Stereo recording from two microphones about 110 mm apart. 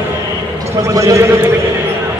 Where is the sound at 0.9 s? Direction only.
30° right (ahead or behind).